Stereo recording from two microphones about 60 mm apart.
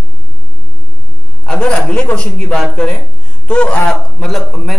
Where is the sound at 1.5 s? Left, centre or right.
Centre.